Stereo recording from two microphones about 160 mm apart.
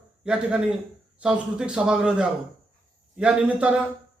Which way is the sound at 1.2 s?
5° right (ahead or behind).